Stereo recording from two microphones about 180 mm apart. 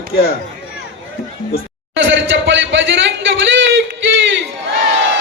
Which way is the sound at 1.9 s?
90° right.